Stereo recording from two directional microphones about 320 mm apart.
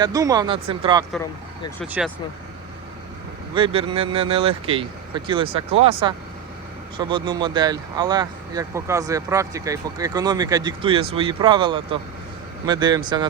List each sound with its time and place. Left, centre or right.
0.0 s speech: centre
1.1 s speech: centre
3.5 s speech: centre